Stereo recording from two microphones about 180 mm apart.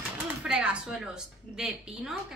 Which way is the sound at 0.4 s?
5° right (ahead or behind).